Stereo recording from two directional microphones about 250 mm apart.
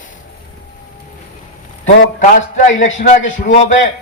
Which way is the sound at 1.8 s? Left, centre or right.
Left.